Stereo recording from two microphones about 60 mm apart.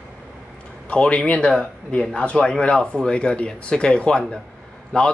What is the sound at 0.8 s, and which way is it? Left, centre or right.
Speech, centre.